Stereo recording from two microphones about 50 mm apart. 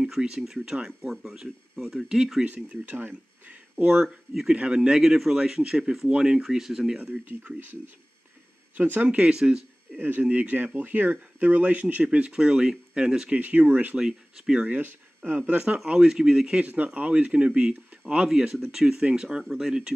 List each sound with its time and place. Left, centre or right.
0.0 s speech: centre
2.4 s speech: right
4.5 s speech: centre
7.2 s speech: right
9.1 s speech: centre
9.9 s speech: right
12.0 s speech: right
13.3 s speech: right
13.9 s speech: centre
14.7 s speech: right
15.9 s speech: centre
16.6 s speech: right
19.4 s speech: centre